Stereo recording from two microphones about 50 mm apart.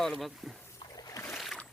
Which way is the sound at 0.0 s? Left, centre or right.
Centre.